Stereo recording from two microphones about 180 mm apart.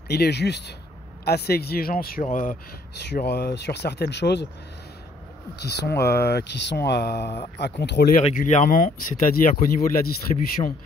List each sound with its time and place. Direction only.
0.1 s speech: 65° left (ahead or behind); by 2.5 s 45° left (ahead or behind)
3.1 s speech: 60° left (ahead or behind)
5.6 s speech: 70° left (ahead or behind)
8.4 s speech: 45° left (ahead or behind)